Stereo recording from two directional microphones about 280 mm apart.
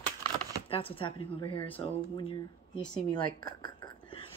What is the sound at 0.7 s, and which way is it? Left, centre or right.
A woman's voice, centre.